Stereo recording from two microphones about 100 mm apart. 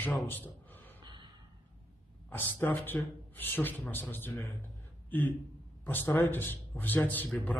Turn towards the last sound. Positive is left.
turn(degrees=20)  # may be behind; listen again after turning